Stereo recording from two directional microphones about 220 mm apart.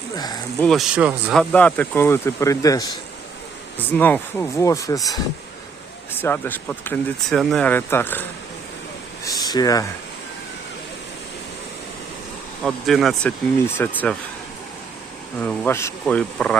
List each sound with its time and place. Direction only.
0.6 s speech: centre (ahead or behind)
6.1 s speech: 10° left (ahead or behind)
9.2 s speech: 15° left (ahead or behind)
12.6 s speech: centre (ahead or behind)
15.4 s speech: 10° left (ahead or behind)